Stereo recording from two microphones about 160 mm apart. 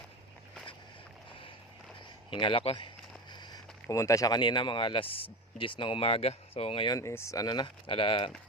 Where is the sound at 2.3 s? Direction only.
35° left (ahead or behind).